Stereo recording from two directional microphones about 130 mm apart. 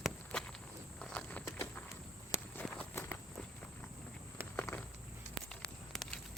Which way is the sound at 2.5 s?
10° left (ahead or behind).